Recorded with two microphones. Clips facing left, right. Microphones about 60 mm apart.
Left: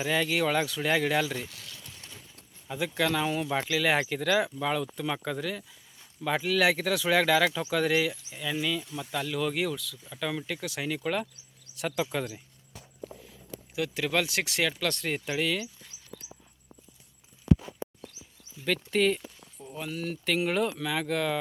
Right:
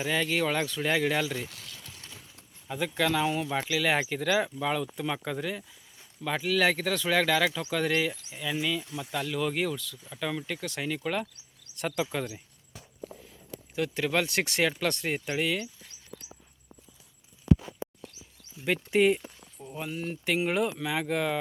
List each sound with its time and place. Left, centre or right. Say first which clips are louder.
0.0 s speech: left 1 dB; centre
2.6 s speech: even; centre
13.7 s speech: right 1 dB; centre
18.6 s speech: right 2 dB; centre